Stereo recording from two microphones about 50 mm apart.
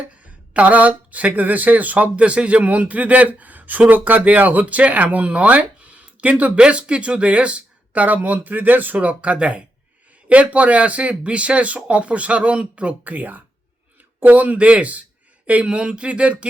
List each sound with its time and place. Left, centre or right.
0.5 s speech: right